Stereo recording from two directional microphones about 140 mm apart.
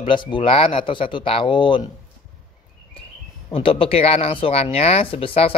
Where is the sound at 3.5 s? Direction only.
40° left (ahead or behind).